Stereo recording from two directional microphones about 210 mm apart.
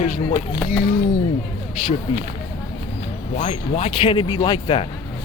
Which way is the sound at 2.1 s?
25° left (ahead or behind).